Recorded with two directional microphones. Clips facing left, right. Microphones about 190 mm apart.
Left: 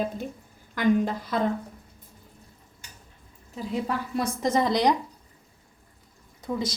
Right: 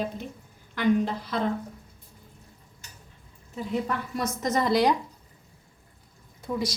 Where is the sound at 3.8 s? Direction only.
30° left (ahead or behind).